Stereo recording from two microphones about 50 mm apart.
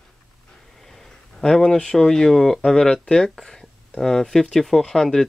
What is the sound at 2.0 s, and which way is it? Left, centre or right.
Speech, centre.